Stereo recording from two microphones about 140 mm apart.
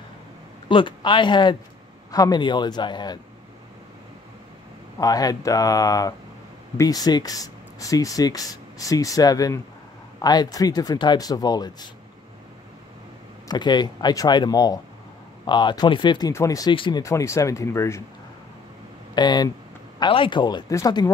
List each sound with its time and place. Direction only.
0.7 s a man's voice: 35° left (ahead or behind)
4.9 s speech: 25° left (ahead or behind)
13.5 s speech: 30° left (ahead or behind)
16.7 s a man's voice: 35° left (ahead or behind)
17.0 s speech: 20° left (ahead or behind)
19.1 s a man's voice: 30° left (ahead or behind)